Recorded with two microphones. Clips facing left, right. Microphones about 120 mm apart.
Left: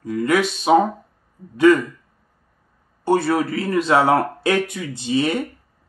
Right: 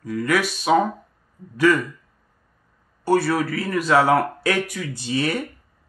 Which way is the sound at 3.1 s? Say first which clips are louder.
Left 1 dB; 20° left (ahead or behind).